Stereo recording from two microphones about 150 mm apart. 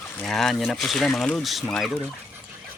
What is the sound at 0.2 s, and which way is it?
Speech, 5° left (ahead or behind).